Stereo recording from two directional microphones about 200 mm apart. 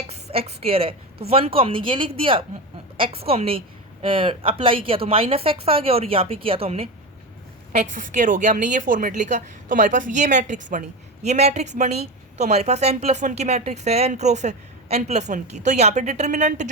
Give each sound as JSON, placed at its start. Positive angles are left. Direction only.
{"t": 0.1, "sound": "a woman's voice", "side_deg": -30}
{"t": 8.1, "sound": "a woman's voice", "side_deg": -40}